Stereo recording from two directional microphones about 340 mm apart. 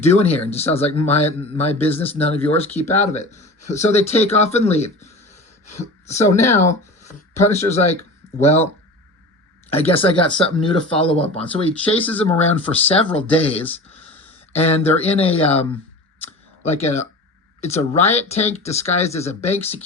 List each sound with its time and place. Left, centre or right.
0.0 s speech: centre
9.7 s speech: centre